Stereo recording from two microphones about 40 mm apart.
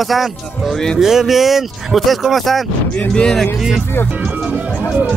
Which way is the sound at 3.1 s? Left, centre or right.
Centre.